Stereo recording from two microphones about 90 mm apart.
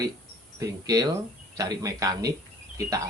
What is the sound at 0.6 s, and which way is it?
Speech, 40° right (ahead or behind).